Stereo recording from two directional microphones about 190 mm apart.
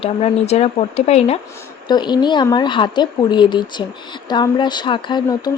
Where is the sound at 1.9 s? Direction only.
25° left (ahead or behind).